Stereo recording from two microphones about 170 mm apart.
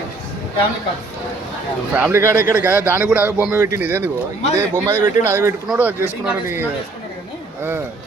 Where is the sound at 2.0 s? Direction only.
15° right (ahead or behind).